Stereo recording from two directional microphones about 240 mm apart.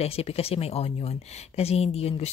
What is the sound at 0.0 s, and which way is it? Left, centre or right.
A woman's voice, left.